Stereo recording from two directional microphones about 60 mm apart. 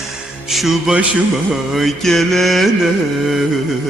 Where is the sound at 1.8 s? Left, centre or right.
Centre.